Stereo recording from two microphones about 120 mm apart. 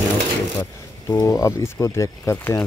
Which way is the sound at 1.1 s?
25° left (ahead or behind).